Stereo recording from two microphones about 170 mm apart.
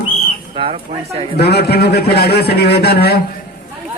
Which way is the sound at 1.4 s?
70° left (ahead or behind).